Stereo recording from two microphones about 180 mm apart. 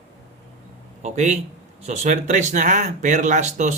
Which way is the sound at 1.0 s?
40° right (ahead or behind).